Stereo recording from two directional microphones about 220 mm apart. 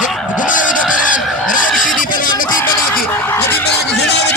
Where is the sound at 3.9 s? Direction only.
50° left (ahead or behind).